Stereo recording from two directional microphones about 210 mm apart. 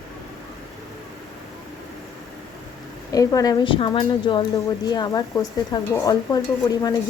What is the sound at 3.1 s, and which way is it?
Speech, 15° left (ahead or behind).